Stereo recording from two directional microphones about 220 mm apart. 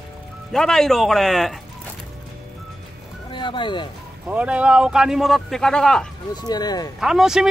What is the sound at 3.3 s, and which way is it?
Speech, 20° left (ahead or behind).